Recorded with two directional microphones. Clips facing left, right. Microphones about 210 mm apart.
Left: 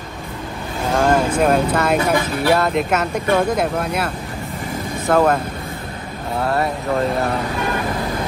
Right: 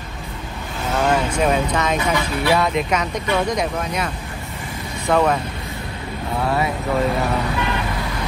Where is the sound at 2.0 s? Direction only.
50° left (ahead or behind).